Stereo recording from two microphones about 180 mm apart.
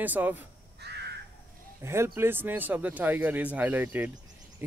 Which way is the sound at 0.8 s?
65° right (ahead or behind).